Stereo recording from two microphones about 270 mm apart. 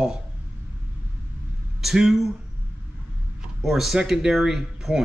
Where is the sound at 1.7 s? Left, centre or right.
Centre.